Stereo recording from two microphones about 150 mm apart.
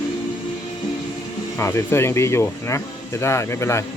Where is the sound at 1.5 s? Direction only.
15° left (ahead or behind).